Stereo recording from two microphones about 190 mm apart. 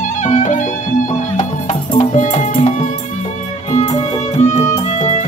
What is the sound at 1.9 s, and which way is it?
Music, 35° left (ahead or behind).